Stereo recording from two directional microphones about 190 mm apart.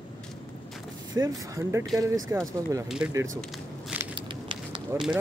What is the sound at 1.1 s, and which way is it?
Speech, 20° right (ahead or behind).